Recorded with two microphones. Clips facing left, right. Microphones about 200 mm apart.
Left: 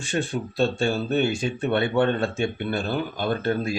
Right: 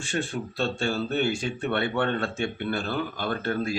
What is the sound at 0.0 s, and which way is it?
Speech, 20° left (ahead or behind).